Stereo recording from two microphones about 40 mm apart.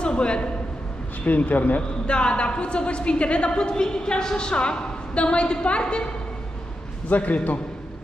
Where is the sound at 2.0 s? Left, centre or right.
Left.